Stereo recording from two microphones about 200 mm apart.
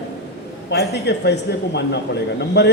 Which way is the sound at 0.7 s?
55° left (ahead or behind).